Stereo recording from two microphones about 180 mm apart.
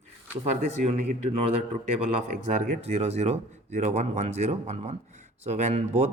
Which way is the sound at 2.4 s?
40° right (ahead or behind).